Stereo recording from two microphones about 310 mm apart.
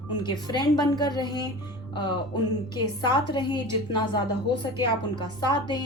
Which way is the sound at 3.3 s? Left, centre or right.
Centre.